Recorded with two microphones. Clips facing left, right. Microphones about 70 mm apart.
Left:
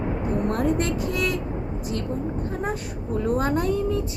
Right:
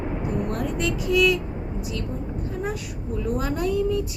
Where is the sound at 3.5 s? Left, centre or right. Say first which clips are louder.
Even; left.